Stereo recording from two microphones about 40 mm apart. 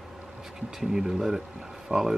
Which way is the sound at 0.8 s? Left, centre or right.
Centre.